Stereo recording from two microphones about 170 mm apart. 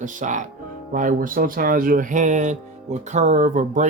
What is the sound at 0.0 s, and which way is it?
Speech, 50° right (ahead or behind).